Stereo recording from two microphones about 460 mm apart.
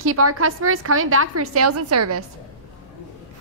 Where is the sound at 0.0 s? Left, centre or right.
Right.